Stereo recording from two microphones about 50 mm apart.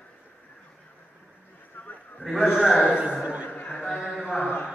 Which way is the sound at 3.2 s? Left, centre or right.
Right.